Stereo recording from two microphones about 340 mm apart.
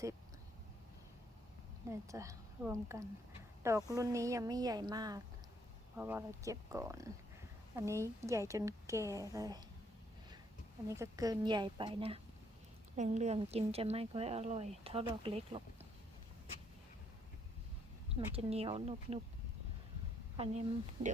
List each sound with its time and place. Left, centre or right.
1.9 s speech: centre
10.8 s speech: centre
18.3 s speech: centre
20.3 s speech: centre